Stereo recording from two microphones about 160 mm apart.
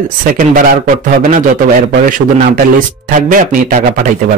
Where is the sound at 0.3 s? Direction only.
60° right (ahead or behind).